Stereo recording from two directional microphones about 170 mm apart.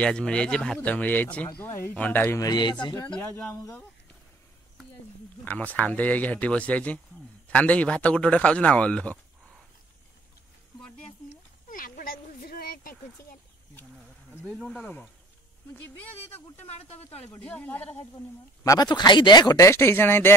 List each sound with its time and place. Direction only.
0.0 s speech: 5° left (ahead or behind)
2.4 s speech: 25° left (ahead or behind)
5.4 s a man's voice: 10° left (ahead or behind)
11.7 s a sound: 55° left (ahead or behind)
14.4 s speech: 5° right (ahead or behind)
16.3 s speech: 10° left (ahead or behind)